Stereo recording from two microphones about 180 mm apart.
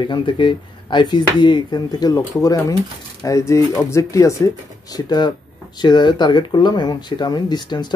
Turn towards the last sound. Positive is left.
turn(degrees=25)  # may be behind; listen again after turning